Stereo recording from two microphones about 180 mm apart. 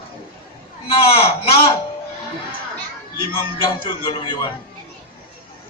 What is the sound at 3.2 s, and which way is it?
A man's voice, 30° left (ahead or behind).